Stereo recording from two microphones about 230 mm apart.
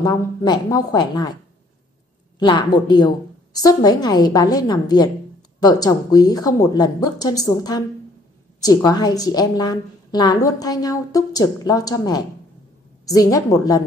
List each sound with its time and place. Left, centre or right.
0.0 s a woman's voice: centre
2.3 s a woman's voice: centre